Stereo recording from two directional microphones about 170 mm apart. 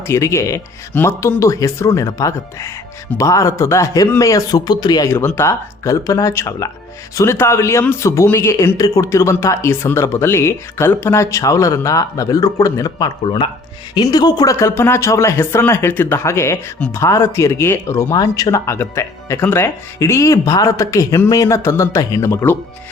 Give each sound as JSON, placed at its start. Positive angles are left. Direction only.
{"t": 0.1, "sound": "speech", "side_deg": 15}